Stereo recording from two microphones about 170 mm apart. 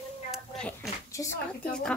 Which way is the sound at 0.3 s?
5° left (ahead or behind).